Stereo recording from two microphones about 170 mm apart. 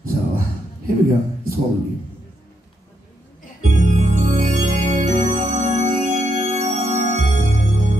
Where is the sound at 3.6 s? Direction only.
45° right (ahead or behind).